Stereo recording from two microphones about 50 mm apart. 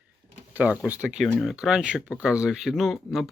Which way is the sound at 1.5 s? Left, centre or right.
Centre.